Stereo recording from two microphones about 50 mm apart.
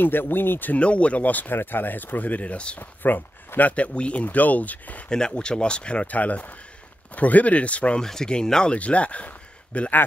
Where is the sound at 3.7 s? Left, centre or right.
Left.